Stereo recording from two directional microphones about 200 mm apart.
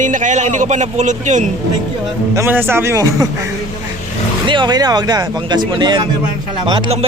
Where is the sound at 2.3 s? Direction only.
10° right (ahead or behind).